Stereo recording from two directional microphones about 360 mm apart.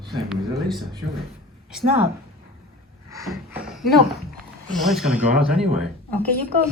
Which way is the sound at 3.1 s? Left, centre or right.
Centre.